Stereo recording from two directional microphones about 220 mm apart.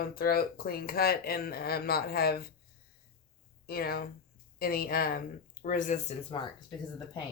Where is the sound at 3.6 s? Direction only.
45° left (ahead or behind).